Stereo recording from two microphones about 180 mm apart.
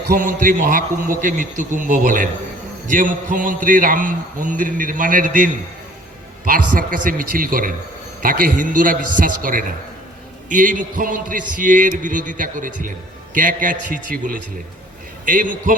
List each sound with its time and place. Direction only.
0.2 s a man's voice: 50° right (ahead or behind)